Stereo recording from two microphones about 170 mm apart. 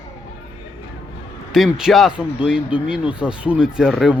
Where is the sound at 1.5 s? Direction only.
Centre (ahead or behind).